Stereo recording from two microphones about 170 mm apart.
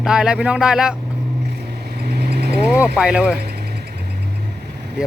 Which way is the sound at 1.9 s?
70° right (ahead or behind).